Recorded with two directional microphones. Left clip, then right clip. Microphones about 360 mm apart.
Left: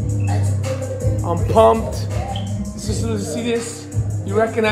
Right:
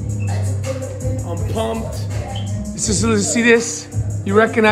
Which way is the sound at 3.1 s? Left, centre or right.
Centre.